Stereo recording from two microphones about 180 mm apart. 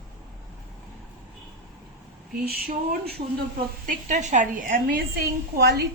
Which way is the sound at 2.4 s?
60° right (ahead or behind).